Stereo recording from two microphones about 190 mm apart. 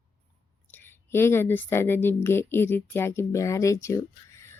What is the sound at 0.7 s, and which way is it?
Speech, 10° left (ahead or behind).